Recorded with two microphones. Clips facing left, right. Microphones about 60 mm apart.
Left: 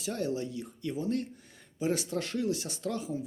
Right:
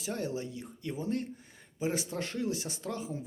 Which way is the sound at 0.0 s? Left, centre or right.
Right.